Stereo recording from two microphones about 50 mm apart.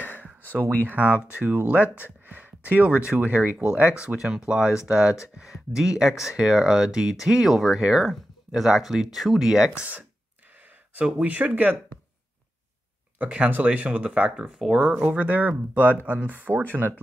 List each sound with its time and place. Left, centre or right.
0.8 s speech: right
2.2 s a sound: right
3.1 s speech: right; by 9.7 s centre
9.8 s speech: right
11.0 s speech: centre
11.2 s speech: right
13.5 s speech: right
14.3 s speech: centre
15.0 s speech: right